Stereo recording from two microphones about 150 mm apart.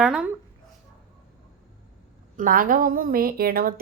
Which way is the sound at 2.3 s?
65° right (ahead or behind).